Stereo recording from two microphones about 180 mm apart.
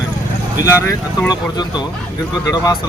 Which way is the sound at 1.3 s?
25° left (ahead or behind).